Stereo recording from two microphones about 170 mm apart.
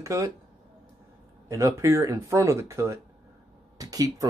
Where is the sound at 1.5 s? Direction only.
15° right (ahead or behind).